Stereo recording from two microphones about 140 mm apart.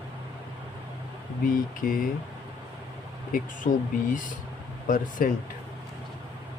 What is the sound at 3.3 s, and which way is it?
Speech, 70° left (ahead or behind).